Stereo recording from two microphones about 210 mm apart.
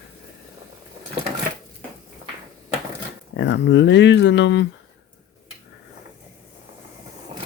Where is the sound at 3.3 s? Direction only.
60° left (ahead or behind).